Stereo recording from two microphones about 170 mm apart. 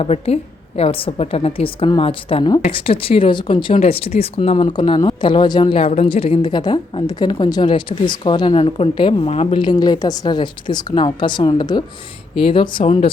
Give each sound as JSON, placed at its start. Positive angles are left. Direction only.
{"t": 0.0, "sound": "a woman's voice", "side_deg": 35}
{"t": 12.8, "sound": "speech", "side_deg": 45}